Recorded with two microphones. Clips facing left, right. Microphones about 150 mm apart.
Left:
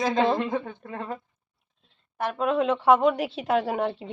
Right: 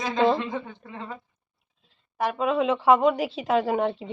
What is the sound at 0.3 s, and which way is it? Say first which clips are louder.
Speech: left 3 dB; 55° left (ahead or behind).